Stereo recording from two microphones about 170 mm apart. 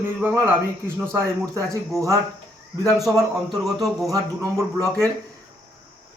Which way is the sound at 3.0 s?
Centre (ahead or behind).